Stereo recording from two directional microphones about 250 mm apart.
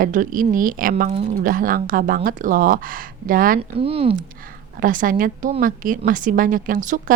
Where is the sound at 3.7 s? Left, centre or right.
Right.